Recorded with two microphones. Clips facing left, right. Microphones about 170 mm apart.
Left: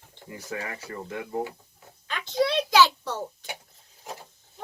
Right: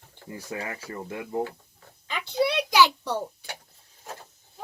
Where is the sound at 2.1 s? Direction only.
15° right (ahead or behind).